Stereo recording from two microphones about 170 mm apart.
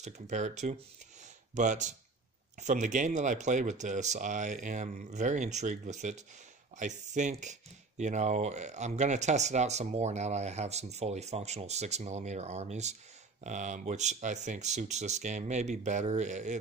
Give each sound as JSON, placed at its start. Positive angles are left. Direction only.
{"t": 0.0, "sound": "speech", "side_deg": -45}